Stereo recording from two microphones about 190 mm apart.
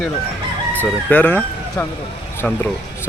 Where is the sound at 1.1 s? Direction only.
10° left (ahead or behind).